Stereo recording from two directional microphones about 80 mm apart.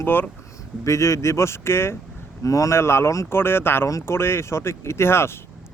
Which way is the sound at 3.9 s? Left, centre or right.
Left.